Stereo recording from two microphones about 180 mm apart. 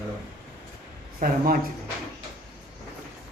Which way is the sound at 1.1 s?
55° right (ahead or behind).